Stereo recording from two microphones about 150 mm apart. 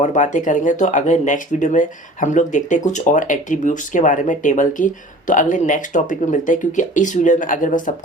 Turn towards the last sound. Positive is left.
turn(degrees=60)  # may be behind; listen again after turning